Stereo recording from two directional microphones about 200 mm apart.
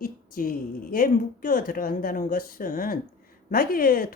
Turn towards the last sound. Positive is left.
turn(degrees=45)  # may be behind; listen again after turning